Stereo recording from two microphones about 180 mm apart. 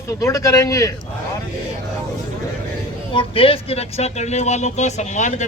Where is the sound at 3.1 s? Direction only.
30° left (ahead or behind).